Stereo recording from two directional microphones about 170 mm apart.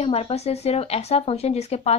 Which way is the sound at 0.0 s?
35° left (ahead or behind).